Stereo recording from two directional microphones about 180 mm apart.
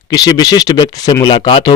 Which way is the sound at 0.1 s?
20° left (ahead or behind).